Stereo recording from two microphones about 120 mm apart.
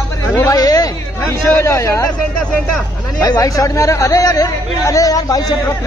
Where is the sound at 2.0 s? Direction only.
10° left (ahead or behind).